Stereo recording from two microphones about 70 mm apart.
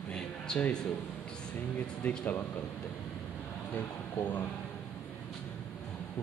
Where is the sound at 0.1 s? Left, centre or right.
Centre.